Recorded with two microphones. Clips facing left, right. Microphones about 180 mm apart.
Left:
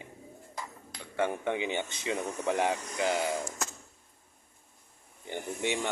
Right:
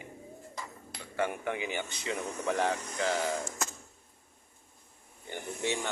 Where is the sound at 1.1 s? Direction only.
25° left (ahead or behind).